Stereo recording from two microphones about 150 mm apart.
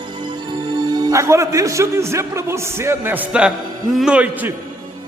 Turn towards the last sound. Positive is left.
turn(degrees=-10)  # may be behind; listen again after turning